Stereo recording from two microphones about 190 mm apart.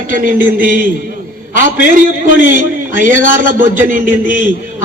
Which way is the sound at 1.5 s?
45° right (ahead or behind).